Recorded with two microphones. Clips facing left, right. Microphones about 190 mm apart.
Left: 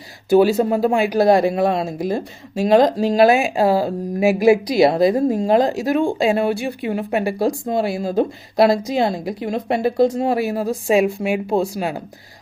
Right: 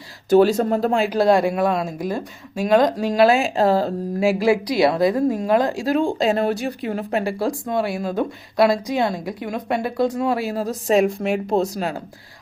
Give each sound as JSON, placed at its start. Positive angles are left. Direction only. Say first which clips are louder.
{"t": 0.3, "sound": "speech", "louder": "left 1 dB", "side_deg": 10}
{"t": 6.5, "sound": "speech", "louder": "left 1 dB", "side_deg": -40}
{"t": 6.8, "sound": "speech", "louder": "left 3 dB", "side_deg": 15}